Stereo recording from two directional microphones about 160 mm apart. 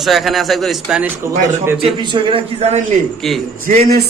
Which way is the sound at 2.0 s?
30° right (ahead or behind).